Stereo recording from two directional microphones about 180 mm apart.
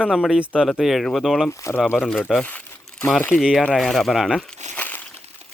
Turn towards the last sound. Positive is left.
turn(degrees=10)  # may be behind; listen again after turning